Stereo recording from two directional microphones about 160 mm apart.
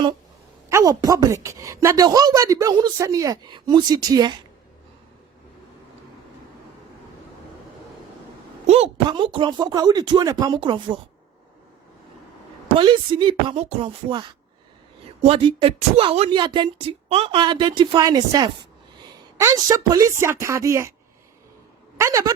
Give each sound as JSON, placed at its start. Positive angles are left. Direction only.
{"t": 0.7, "sound": "speech", "side_deg": -20}
{"t": 8.6, "sound": "a sound", "side_deg": -40}
{"t": 9.0, "sound": "speech", "side_deg": -30}
{"t": 12.7, "sound": "speech", "side_deg": -30}
{"t": 14.1, "sound": "speech", "side_deg": -30}
{"t": 21.9, "sound": "speech", "side_deg": -20}